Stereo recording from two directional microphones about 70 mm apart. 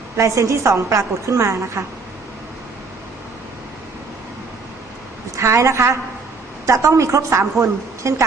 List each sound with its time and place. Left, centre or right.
0.2 s a woman's voice: right
5.4 s a woman's voice: right